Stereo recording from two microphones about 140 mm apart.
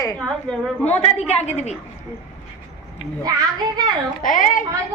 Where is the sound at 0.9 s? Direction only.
50° left (ahead or behind).